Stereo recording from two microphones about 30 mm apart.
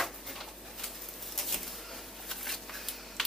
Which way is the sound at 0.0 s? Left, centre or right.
Centre.